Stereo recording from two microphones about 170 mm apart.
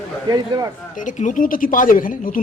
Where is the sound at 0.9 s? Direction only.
50° left (ahead or behind).